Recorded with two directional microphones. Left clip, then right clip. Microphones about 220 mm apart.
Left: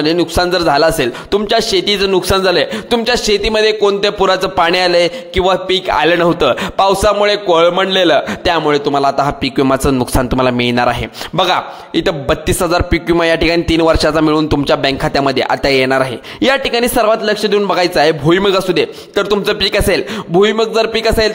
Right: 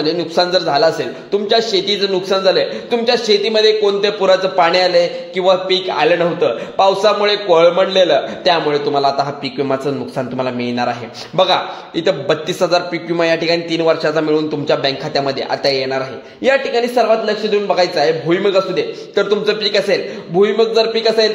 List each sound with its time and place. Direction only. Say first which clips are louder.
0.0 s a man's voice: left 2 dB; 35° left (ahead or behind)